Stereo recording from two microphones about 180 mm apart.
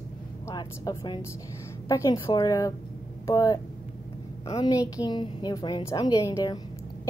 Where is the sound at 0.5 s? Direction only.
20° left (ahead or behind).